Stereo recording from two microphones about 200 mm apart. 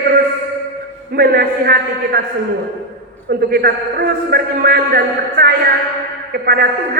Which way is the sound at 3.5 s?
50° right (ahead or behind).